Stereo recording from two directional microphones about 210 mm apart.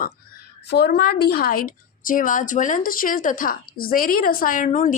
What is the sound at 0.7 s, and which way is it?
A woman's voice, 50° left (ahead or behind).